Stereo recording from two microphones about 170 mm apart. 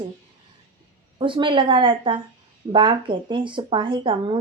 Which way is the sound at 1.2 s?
30° right (ahead or behind).